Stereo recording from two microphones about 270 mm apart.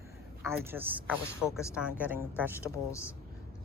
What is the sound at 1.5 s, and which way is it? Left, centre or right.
Speech, centre.